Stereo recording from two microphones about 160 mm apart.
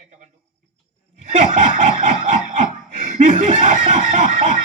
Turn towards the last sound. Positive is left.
turn(degrees=-50)  # may be behind; listen again after turning